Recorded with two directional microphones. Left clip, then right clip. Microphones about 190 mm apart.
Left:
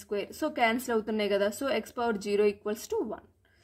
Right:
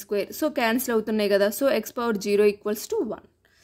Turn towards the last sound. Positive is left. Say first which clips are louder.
# right 5 dB
turn(degrees=-30)  # may be behind; listen again after turning